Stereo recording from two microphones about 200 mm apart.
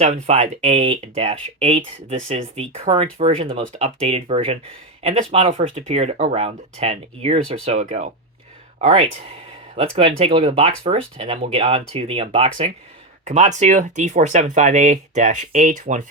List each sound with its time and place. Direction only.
0.0 s speech: 35° right (ahead or behind)